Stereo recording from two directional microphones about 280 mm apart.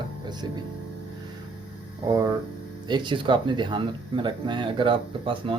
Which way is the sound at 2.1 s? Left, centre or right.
Centre.